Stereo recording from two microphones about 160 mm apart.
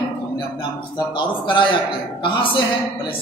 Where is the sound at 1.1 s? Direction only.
30° left (ahead or behind).